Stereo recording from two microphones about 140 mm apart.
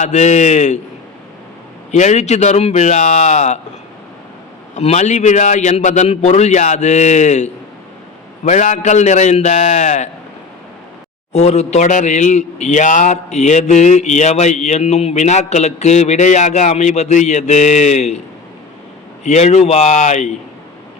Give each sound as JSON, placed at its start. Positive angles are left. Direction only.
{"t": 0.0, "sound": "a man's voice", "side_deg": 55}
{"t": 1.9, "sound": "a man's voice", "side_deg": 55}
{"t": 4.7, "sound": "a man's voice", "side_deg": 50}
{"t": 11.3, "sound": "a man's voice", "side_deg": 50}
{"t": 19.2, "sound": "a man's voice", "side_deg": 55}